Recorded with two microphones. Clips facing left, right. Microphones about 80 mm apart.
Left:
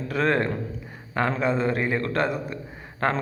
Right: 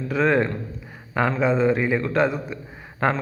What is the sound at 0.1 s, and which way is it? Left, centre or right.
A man's voice, centre.